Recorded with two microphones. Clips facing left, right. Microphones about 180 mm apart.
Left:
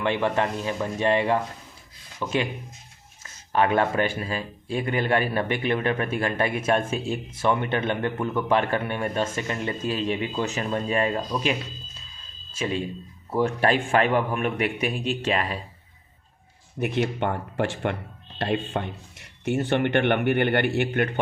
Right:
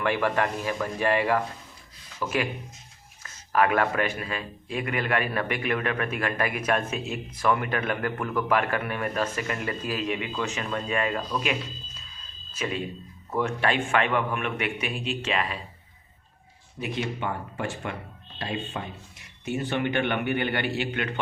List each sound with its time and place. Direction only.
0.0 s a man's voice: 20° left (ahead or behind)
12.5 s a man's voice: 30° left (ahead or behind)
16.8 s speech: 60° left (ahead or behind)